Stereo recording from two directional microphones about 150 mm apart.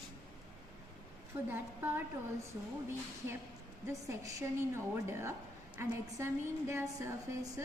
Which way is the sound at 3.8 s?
20° right (ahead or behind).